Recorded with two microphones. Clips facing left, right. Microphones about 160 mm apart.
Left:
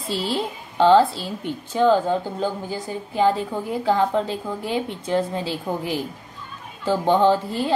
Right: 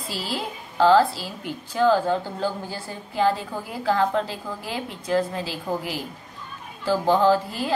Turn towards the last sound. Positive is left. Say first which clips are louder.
# left 1 dB
turn(degrees=25)  # may be behind; listen again after turning